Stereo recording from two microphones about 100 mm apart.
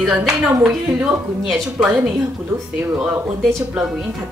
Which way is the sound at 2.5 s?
30° right (ahead or behind).